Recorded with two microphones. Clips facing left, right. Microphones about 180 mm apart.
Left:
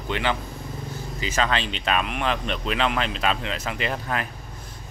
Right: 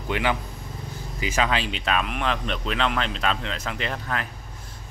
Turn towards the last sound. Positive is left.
turn(degrees=5)  # may be behind; listen again after turning